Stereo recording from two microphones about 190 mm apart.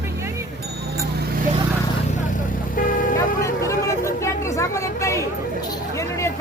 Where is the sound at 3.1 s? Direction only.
15° left (ahead or behind).